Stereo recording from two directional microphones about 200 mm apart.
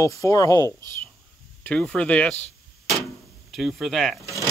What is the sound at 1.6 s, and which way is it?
Speech, 5° left (ahead or behind).